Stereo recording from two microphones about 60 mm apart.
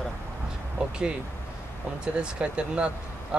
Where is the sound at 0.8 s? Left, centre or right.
Centre.